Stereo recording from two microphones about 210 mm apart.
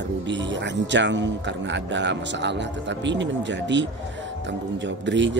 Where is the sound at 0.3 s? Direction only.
60° right (ahead or behind).